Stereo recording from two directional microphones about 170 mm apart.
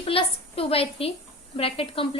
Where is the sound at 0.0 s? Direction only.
35° left (ahead or behind).